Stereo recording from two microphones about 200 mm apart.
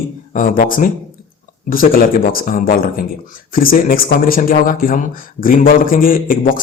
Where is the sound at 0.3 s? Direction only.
45° left (ahead or behind).